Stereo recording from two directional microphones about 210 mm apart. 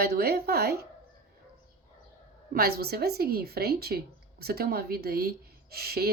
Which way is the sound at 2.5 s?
45° right (ahead or behind).